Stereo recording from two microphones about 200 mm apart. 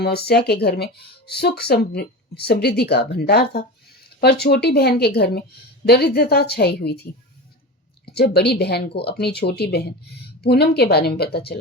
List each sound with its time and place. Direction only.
0.0 s speech: 55° left (ahead or behind)